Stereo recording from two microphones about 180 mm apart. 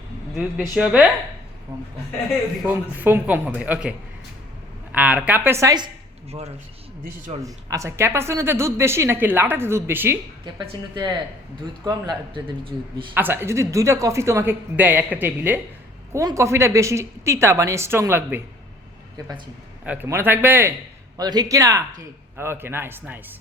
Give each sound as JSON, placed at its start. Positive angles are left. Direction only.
{"t": 0.3, "sound": "speech", "side_deg": -5}
{"t": 2.6, "sound": "a woman's voice", "side_deg": -10}
{"t": 7.4, "sound": "a woman's voice", "side_deg": -15}
{"t": 10.4, "sound": "a man's voice", "side_deg": -25}
{"t": 13.1, "sound": "a woman's voice", "side_deg": -10}
{"t": 19.8, "sound": "a woman's voice", "side_deg": -10}
{"t": 21.2, "sound": "a man's voice", "side_deg": -20}